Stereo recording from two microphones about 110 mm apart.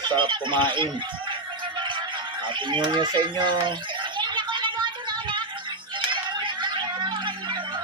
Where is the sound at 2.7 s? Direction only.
45° right (ahead or behind).